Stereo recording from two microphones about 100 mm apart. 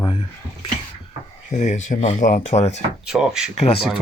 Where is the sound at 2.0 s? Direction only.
90° left.